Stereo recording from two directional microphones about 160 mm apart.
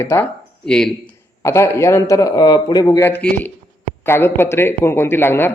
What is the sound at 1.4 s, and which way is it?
Speech, 20° left (ahead or behind).